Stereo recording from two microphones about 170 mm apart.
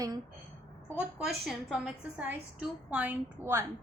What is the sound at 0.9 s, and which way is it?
A woman's voice, 5° right (ahead or behind).